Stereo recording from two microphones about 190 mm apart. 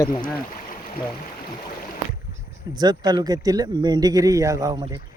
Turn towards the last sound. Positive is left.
turn(degrees=-15)  # may be behind; listen again after turning